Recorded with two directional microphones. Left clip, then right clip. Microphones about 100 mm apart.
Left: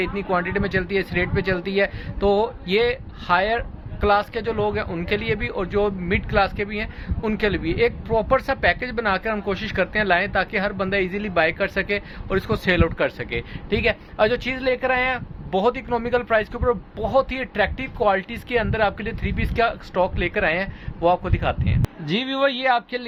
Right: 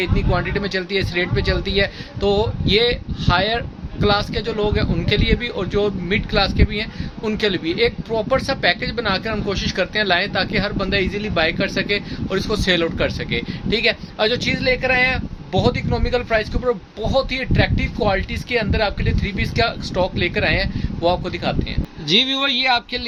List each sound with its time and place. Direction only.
0.0 s speech: 25° right (ahead or behind)
22.0 s speech: 5° right (ahead or behind)